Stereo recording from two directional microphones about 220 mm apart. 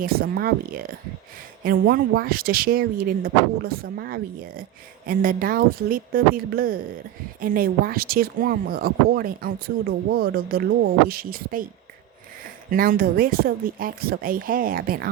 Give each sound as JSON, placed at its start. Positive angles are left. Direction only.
{"t": 0.0, "sound": "speech", "side_deg": -45}
{"t": 12.7, "sound": "speech", "side_deg": -40}